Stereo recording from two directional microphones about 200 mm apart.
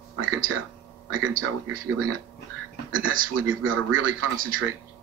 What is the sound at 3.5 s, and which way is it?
Speech, 80° right.